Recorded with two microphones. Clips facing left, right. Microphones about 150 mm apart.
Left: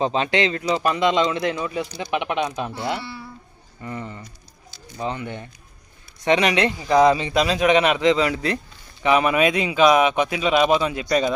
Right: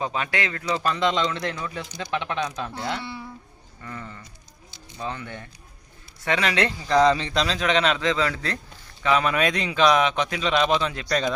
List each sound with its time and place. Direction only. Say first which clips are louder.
0.0 s speech: left 7 dB; 25° left (ahead or behind)
3.0 s speech: even; 20° right (ahead or behind)
3.8 s speech: left 6 dB; 20° left (ahead or behind)